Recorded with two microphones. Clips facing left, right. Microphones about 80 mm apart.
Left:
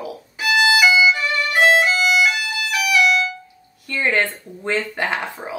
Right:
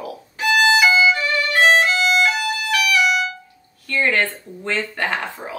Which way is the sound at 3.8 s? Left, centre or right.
Centre.